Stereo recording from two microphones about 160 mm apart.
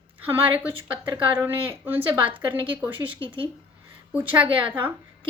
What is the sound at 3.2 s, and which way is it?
Speech, 30° right (ahead or behind).